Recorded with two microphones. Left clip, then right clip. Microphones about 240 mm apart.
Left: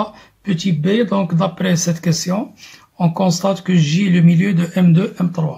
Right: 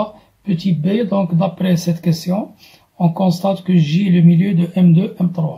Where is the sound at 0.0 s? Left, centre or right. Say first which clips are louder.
Right 1 dB; centre.